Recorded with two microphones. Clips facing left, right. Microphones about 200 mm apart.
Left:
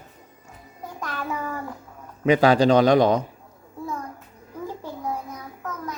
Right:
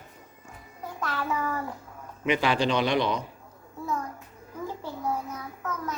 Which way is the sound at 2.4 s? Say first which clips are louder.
Left 10 dB; 40° left (ahead or behind).